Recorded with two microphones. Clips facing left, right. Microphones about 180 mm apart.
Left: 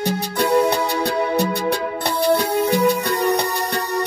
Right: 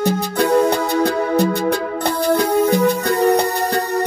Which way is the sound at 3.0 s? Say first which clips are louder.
Right 4 dB; 40° right (ahead or behind).